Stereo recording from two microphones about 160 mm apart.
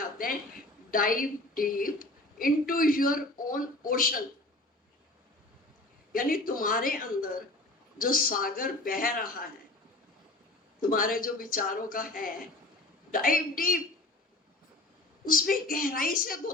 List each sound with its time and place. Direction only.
0.0 s a sound: 60° left (ahead or behind)
0.9 s a woman's voice: 60° left (ahead or behind)
6.1 s a woman's voice: 60° left (ahead or behind)
10.8 s a woman's voice: 60° left (ahead or behind)
15.3 s a woman's voice: 60° left (ahead or behind)